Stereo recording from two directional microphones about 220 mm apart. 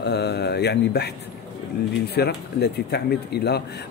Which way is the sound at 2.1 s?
45° left (ahead or behind).